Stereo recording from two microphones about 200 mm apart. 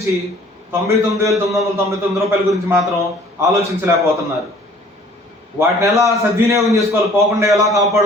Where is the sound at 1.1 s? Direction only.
15° right (ahead or behind).